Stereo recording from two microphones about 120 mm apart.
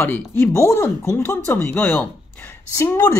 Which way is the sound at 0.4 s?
20° left (ahead or behind).